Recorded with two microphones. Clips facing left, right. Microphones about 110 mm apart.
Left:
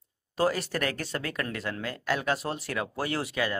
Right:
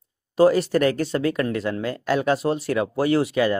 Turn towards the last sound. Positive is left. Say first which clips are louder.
# right 10 dB
turn(degrees=-25)  # may be behind; listen again after turning